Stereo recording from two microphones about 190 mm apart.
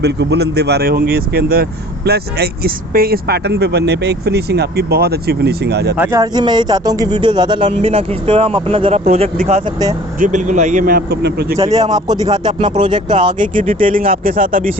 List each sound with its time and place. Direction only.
0.0 s speech: 60° right (ahead or behind)
6.0 s speech: 15° right (ahead or behind); by 11.3 s 50° right (ahead or behind)
11.7 s speech: 20° right (ahead or behind)
13.8 s speech: 45° right (ahead or behind)